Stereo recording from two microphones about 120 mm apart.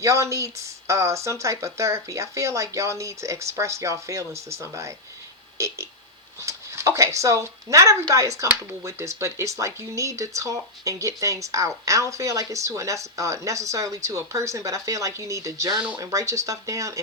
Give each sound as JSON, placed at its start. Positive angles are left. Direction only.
{"t": 0.0, "sound": "speech", "side_deg": -25}